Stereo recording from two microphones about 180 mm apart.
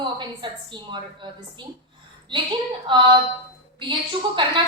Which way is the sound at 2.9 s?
25° right (ahead or behind).